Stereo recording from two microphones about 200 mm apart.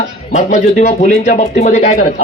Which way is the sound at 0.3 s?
35° left (ahead or behind).